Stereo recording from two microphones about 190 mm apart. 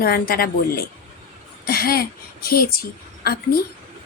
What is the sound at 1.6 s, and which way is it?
A woman's voice, 50° left (ahead or behind).